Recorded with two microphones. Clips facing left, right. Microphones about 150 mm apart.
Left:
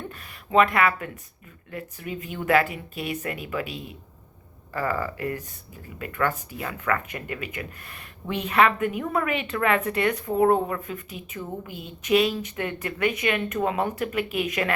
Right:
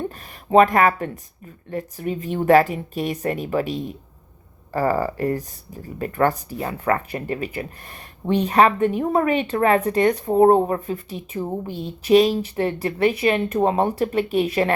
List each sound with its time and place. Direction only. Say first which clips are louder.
0.5 s a woman's voice: right 5 dB; 40° right (ahead or behind)